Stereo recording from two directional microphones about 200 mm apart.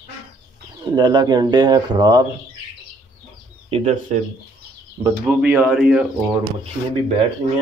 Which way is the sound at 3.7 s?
30° right (ahead or behind).